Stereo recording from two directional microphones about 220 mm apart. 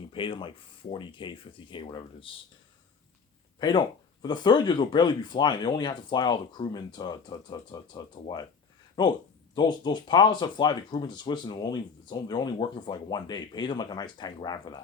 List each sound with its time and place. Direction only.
0.1 s speech: 20° left (ahead or behind)
3.6 s speech: 20° left (ahead or behind)